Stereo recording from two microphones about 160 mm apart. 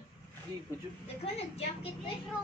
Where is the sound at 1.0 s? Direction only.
40° left (ahead or behind).